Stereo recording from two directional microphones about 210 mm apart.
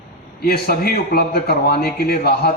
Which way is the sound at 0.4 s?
50° left (ahead or behind).